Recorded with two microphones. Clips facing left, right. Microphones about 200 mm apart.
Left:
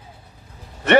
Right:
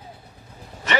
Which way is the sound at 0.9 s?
60° left (ahead or behind).